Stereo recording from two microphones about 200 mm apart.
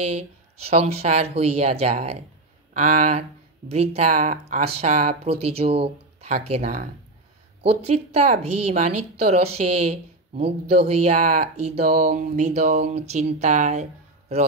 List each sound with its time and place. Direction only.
0.1 s speech: 30° right (ahead or behind)
6.6 s speech: 45° right (ahead or behind)
7.8 s speech: 30° right (ahead or behind)